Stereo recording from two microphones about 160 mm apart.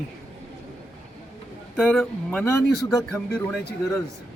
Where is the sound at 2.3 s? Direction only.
15° left (ahead or behind).